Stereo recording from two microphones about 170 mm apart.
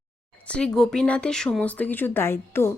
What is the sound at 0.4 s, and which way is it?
Speech, 5° left (ahead or behind).